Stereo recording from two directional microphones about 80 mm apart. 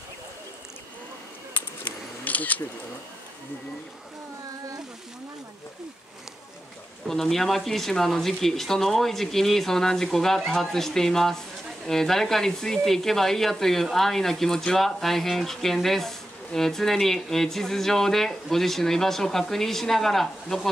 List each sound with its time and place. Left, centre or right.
2.2 s camera: centre
7.1 s speech: centre